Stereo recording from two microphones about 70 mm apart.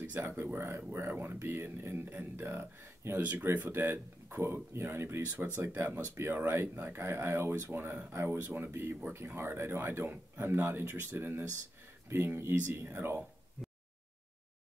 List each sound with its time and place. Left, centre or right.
0.0 s speech: right
3.2 s speech: right